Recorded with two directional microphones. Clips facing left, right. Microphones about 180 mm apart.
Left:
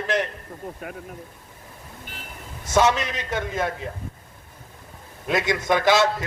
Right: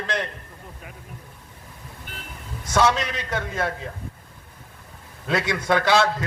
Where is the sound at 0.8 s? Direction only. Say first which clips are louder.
Left 8 dB; 55° left (ahead or behind).